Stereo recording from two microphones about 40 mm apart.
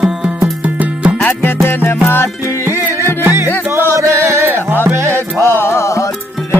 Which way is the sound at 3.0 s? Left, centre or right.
Left.